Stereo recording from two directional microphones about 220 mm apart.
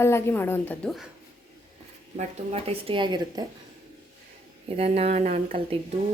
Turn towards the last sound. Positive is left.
turn(degrees=-25)  # may be behind; listen again after turning